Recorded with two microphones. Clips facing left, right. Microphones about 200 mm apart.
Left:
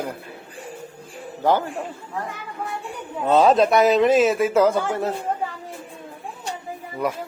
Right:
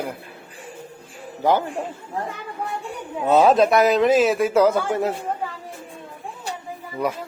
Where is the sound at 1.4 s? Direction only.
15° right (ahead or behind).